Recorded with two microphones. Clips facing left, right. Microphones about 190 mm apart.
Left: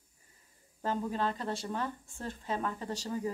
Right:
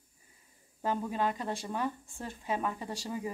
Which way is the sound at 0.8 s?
10° right (ahead or behind).